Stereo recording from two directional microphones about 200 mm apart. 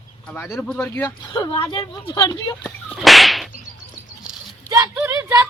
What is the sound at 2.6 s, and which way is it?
Whip, centre (ahead or behind).